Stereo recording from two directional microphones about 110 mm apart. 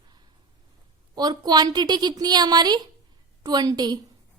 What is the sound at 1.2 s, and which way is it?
A woman's voice, 35° right (ahead or behind).